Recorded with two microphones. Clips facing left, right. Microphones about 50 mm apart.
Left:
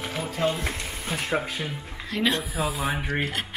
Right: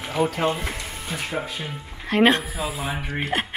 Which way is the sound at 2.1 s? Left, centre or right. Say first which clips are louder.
Right 7 dB; right.